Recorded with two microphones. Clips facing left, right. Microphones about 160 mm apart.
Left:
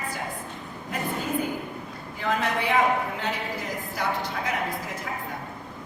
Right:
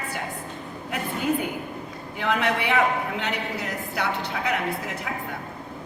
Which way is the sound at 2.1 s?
75° right (ahead or behind).